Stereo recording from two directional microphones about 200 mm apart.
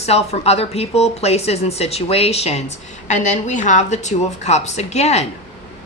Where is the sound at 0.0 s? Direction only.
30° left (ahead or behind).